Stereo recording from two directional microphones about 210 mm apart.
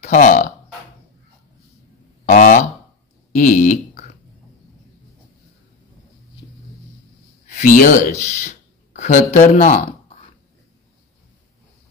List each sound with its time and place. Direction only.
0.0 s speech: 35° left (ahead or behind)
2.2 s a sound: 40° left (ahead or behind)
7.4 s speech: 35° left (ahead or behind)